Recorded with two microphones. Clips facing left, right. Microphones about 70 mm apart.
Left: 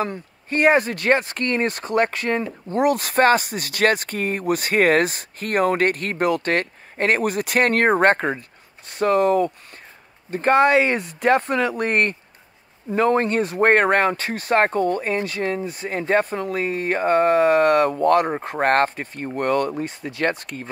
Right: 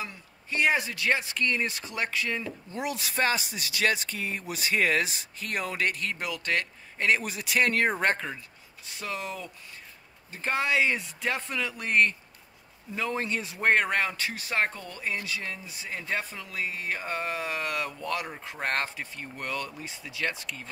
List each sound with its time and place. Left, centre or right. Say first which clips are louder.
0.0 s speech: left 13 dB; left